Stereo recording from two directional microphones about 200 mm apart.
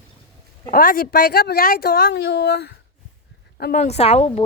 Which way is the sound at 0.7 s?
45° left (ahead or behind).